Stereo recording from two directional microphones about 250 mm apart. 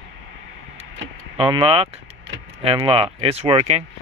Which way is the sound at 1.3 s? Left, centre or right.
Right.